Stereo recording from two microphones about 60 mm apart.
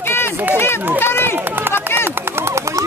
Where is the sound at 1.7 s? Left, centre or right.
Left.